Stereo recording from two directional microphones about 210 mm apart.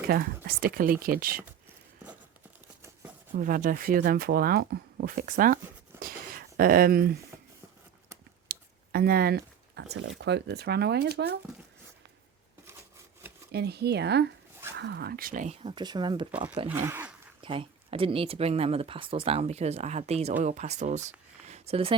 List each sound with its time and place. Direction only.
0.1 s speech: 45° right (ahead or behind)
3.3 s speech: 40° right (ahead or behind)
6.0 s a sound: 45° right (ahead or behind)
8.4 s speech: 45° right (ahead or behind)
13.5 s speech: 50° right (ahead or behind); by 16.3 s 25° right (ahead or behind)
16.6 s speech: 10° right (ahead or behind)
17.4 s speech: 25° right (ahead or behind)
21.4 s a sound: 30° right (ahead or behind)